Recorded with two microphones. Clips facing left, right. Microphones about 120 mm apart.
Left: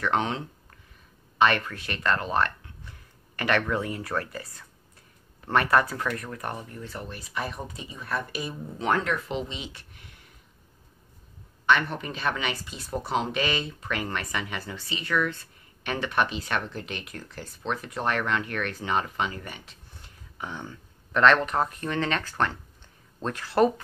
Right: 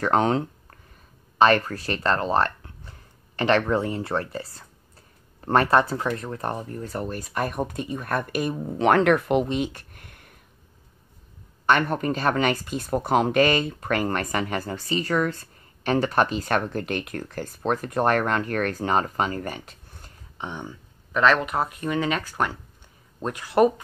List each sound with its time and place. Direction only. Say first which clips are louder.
0.0 s speech: right 6 dB; 40° right (ahead or behind)
11.6 s speech: right 3 dB; 45° right (ahead or behind)
20.3 s speech: right 3 dB; 20° right (ahead or behind)
21.1 s speech: even; 5° right (ahead or behind)